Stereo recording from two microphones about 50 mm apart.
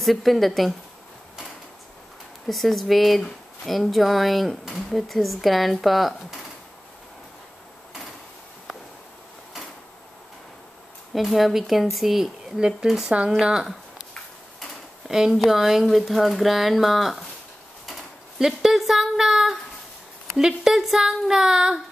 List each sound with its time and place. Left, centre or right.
0.0 s speech: centre
2.4 s speech: centre
11.1 s speech: centre
15.0 s speech: centre
18.4 s speech: centre